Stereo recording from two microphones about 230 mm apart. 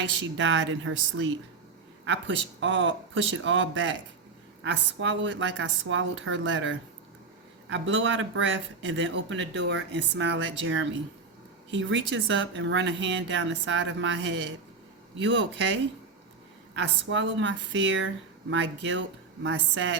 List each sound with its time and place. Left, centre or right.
0.2 s speech: right
16.7 s speech: right